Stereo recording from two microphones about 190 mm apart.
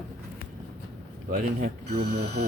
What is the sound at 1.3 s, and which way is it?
Speech, 45° right (ahead or behind).